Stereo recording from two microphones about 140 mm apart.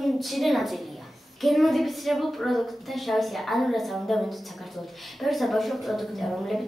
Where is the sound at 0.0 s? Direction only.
Centre (ahead or behind).